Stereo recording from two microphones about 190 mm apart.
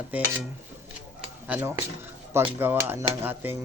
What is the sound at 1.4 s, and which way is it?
Speech, 10° right (ahead or behind).